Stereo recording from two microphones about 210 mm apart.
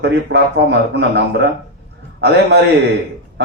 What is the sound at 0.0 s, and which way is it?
A man's voice, 55° right (ahead or behind).